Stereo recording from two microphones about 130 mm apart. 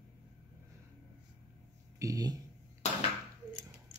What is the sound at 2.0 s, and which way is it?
Speech, 25° right (ahead or behind).